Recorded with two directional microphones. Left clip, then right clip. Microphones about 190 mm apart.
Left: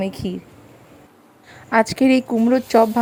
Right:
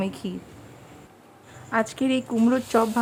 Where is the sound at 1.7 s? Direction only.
25° left (ahead or behind).